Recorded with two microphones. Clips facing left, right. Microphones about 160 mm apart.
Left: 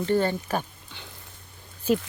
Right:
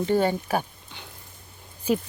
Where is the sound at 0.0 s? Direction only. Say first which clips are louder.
Right 1 dB; 15° right (ahead or behind).